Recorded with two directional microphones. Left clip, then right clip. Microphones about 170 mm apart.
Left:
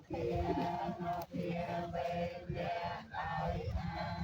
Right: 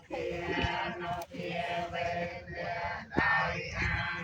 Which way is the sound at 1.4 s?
70° left (ahead or behind).